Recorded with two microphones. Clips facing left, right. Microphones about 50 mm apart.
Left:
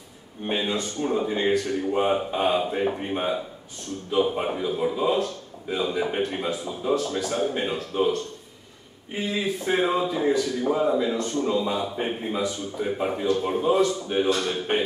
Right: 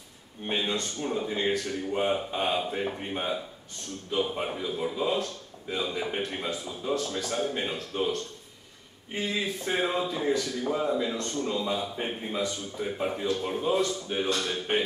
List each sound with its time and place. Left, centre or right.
0.5 s a man's voice: centre